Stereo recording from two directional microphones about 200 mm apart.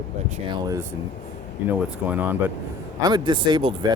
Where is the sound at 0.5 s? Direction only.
20° right (ahead or behind).